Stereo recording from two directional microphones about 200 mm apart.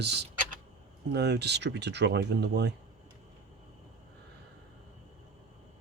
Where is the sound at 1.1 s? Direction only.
55° right (ahead or behind).